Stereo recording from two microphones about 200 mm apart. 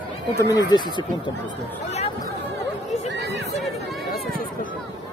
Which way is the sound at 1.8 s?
35° left (ahead or behind).